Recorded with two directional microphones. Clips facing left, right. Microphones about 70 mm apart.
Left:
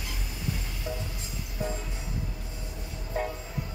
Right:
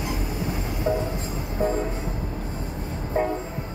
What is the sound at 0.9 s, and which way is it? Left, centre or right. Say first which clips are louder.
Train: right 12 dB; right.